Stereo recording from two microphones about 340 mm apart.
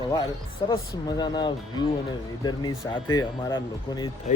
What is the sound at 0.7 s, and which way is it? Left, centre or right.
Speech, centre.